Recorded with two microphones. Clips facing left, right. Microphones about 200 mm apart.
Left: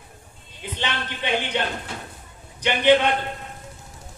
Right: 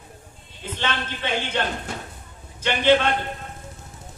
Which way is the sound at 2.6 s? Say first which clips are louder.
Left 1 dB; 15° left (ahead or behind).